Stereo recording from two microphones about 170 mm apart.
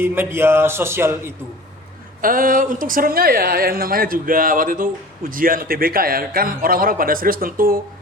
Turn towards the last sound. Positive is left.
turn(degrees=-55)  # may be behind; listen again after turning